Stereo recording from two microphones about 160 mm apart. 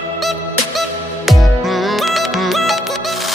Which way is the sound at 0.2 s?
Centre (ahead or behind).